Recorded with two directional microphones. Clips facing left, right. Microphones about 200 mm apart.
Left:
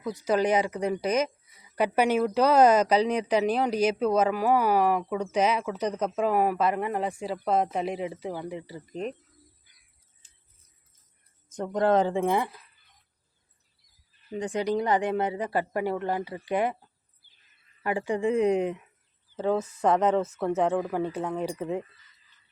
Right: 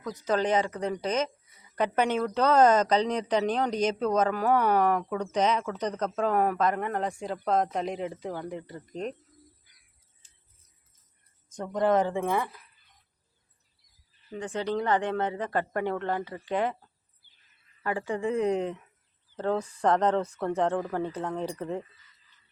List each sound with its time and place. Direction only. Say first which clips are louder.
0.0 s speech: left 2 dB; 10° left (ahead or behind)
11.4 s speech: left 1 dB; 5° left (ahead or behind)
14.3 s speech: left 3 dB; 15° left (ahead or behind)
17.8 s speech: left 3 dB; 15° left (ahead or behind)